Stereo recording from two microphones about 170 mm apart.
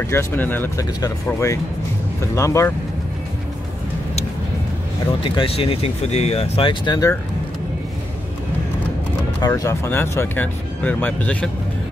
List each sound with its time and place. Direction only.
0.0 s speech: 15° left (ahead or behind)
5.2 s speech: 30° left (ahead or behind)
9.4 s speech: 15° left (ahead or behind)